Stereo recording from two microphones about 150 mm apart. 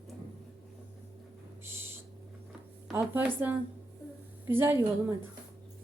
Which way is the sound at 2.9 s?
15° right (ahead or behind).